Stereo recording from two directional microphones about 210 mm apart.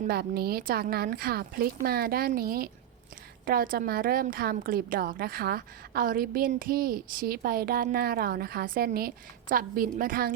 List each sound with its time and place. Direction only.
0.1 s a woman's voice: 50° right (ahead or behind)